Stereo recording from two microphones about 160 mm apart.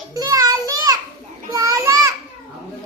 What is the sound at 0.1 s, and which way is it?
Child singing, 20° right (ahead or behind).